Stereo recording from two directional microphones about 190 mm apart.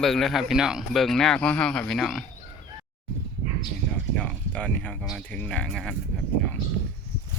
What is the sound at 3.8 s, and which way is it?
Speech, 5° left (ahead or behind).